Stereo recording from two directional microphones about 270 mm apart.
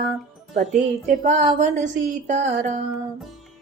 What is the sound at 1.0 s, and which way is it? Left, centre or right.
A woman's voice, right.